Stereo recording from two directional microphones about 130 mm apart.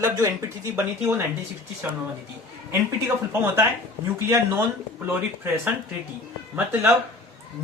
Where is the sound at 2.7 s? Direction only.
20° right (ahead or behind).